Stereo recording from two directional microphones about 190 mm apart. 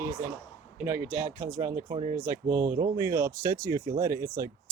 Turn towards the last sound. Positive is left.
turn(degrees=-15)  # may be behind; listen again after turning